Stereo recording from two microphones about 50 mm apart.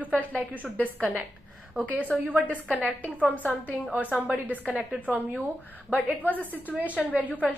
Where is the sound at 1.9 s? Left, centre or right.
Left.